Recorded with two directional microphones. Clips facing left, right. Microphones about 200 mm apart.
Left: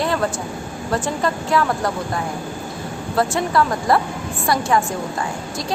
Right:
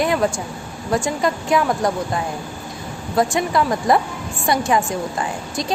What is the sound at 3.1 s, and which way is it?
A woman's voice, 15° right (ahead or behind).